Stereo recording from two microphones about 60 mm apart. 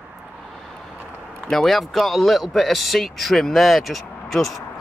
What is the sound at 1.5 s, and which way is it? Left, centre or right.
Speech, centre.